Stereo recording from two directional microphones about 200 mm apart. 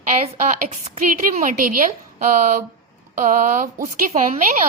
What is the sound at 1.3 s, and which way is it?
A woman's voice, 40° right (ahead or behind).